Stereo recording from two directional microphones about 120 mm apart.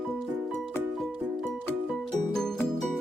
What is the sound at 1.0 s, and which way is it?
Music, centre (ahead or behind).